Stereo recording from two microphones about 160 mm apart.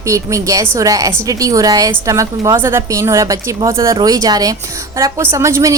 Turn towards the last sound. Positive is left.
turn(degrees=-20)  # may be behind; listen again after turning